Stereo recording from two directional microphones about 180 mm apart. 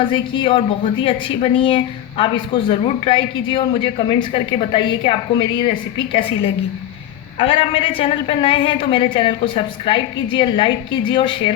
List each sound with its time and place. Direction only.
0.1 s speech: 25° left (ahead or behind)
7.3 s speech: 30° left (ahead or behind)